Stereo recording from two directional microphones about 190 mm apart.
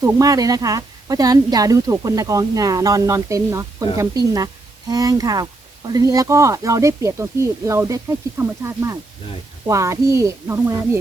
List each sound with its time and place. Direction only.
0.0 s a woman's voice: 20° right (ahead or behind)